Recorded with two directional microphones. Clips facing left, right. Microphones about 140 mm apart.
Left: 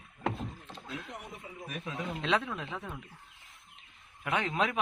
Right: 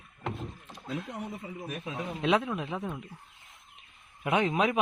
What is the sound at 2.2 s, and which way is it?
Speech, 10° right (ahead or behind).